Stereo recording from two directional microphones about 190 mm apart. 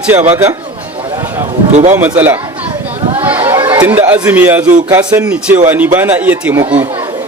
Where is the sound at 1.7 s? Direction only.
40° right (ahead or behind).